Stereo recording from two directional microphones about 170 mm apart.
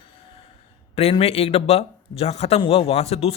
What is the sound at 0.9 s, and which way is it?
Speech, 35° left (ahead or behind).